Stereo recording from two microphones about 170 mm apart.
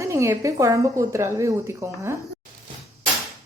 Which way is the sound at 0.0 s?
15° right (ahead or behind).